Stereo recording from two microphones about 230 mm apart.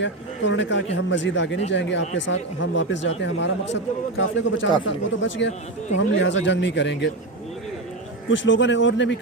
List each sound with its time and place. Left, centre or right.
0.0 s speech: left
8.3 s speech: left